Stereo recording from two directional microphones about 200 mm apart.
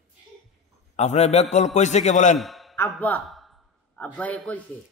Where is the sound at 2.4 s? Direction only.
Centre (ahead or behind).